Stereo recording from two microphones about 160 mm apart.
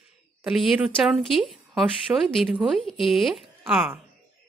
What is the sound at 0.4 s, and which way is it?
Speech, 5° right (ahead or behind).